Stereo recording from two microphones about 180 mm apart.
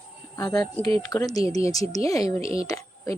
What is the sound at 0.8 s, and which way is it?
Speech, 30° right (ahead or behind).